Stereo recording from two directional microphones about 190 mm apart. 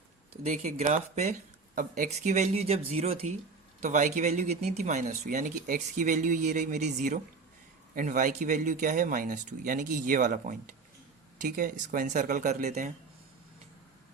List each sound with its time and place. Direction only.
0.4 s speech: 40° right (ahead or behind)